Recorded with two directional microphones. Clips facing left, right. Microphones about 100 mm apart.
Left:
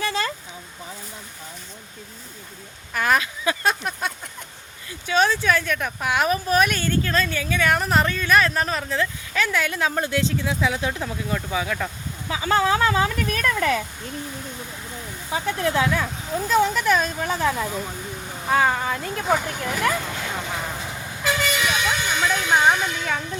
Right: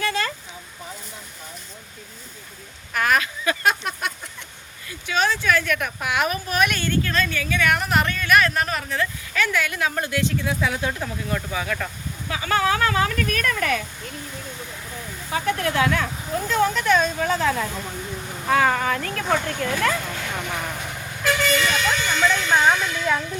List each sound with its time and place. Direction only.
0.0 s a sound: 25° left (ahead or behind)
2.9 s speech: 20° left (ahead or behind)
15.3 s speech: 20° left (ahead or behind)
16.7 s speech: 5° left (ahead or behind)
19.2 s vehicle: 10° left (ahead or behind)